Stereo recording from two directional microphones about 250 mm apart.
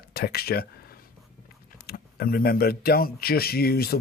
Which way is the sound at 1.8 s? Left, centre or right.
Left.